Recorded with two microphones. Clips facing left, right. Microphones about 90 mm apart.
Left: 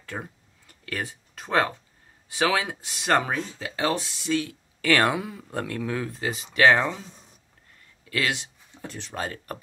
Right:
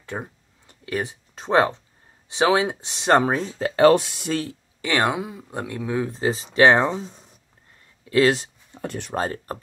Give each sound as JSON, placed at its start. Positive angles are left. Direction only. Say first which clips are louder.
{"t": 0.0, "sound": "a sound", "louder": "right 4 dB", "side_deg": -20}
{"t": 2.2, "sound": "speech", "louder": "right 5 dB", "side_deg": -25}
{"t": 4.3, "sound": "speech", "louder": "even", "side_deg": -40}
{"t": 4.8, "sound": "speech", "louder": "even", "side_deg": -20}
{"t": 8.8, "sound": "speech", "louder": "right 7 dB", "side_deg": -55}
{"t": 9.1, "sound": "speech", "louder": "right 5 dB", "side_deg": -35}